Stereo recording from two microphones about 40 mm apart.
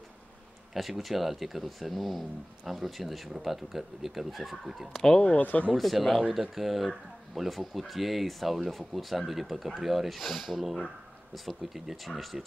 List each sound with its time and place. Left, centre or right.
0.7 s speech: centre
5.2 s speech: left
5.8 s speech: centre